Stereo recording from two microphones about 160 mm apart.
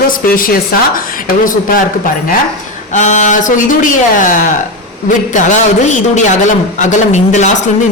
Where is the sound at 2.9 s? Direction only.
50° left (ahead or behind).